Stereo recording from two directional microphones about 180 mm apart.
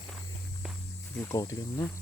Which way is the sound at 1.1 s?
15° left (ahead or behind).